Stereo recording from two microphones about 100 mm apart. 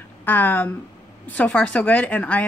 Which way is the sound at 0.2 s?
20° left (ahead or behind).